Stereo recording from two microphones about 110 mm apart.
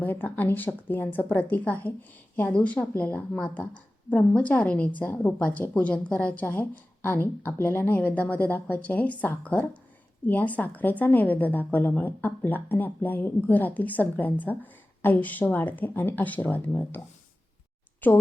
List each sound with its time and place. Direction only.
0.0 s a woman's voice: 15° left (ahead or behind)
18.0 s speech: 15° left (ahead or behind)